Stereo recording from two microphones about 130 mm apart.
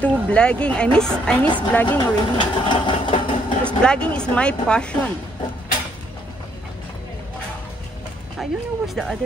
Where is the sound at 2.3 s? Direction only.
35° left (ahead or behind).